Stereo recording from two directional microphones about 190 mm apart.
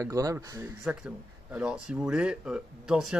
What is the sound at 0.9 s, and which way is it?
Speech, 5° right (ahead or behind).